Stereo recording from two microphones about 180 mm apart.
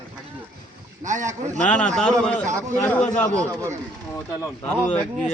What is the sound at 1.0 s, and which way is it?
Speech, 45° right (ahead or behind).